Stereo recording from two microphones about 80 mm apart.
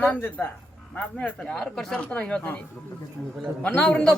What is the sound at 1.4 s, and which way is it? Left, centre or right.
Speech, centre.